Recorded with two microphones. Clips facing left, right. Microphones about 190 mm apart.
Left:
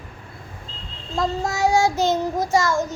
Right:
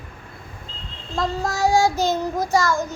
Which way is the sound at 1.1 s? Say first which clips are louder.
Left 1 dB; 20° left (ahead or behind).